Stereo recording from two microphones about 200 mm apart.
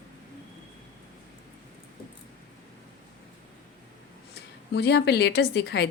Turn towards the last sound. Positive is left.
turn(degrees=55)  # may be behind; listen again after turning